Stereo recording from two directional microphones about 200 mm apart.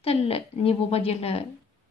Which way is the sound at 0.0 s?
30° left (ahead or behind).